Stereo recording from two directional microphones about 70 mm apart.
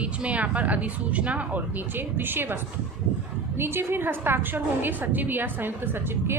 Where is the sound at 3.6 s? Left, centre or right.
Right.